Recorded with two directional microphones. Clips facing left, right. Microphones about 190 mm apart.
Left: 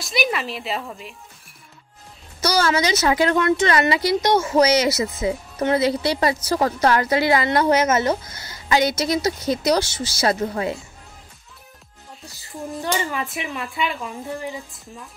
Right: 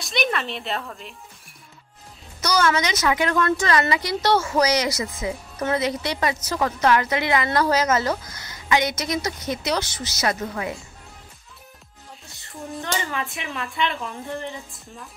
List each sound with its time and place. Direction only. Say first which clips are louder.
0.0 s a woman's voice: left 1 dB; centre (ahead or behind)
2.4 s a woman's voice: left 2 dB; 30° left (ahead or behind)
7.4 s a woman's voice: left 3 dB; 20° left (ahead or behind)
13.1 s a woman's voice: left 2 dB; 5° left (ahead or behind)